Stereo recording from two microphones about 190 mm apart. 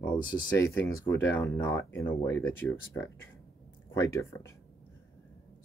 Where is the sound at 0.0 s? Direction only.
10° left (ahead or behind).